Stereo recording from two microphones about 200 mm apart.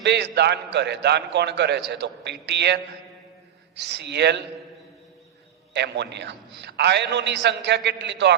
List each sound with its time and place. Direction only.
0.0 s a man's voice: 60° right (ahead or behind)
5.7 s a man's voice: 60° right (ahead or behind)